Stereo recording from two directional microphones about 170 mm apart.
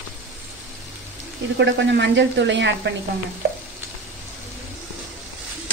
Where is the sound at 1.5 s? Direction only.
90° right.